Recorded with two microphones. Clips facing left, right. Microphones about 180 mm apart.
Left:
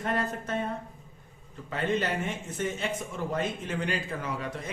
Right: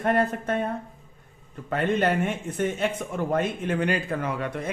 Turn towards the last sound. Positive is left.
turn(degrees=-60)  # may be behind; listen again after turning